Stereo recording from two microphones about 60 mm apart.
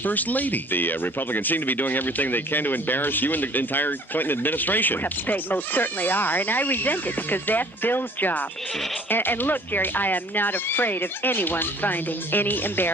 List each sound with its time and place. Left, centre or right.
0.0 s speech: left